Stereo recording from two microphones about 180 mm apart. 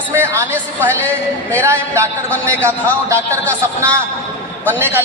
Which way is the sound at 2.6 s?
15° right (ahead or behind).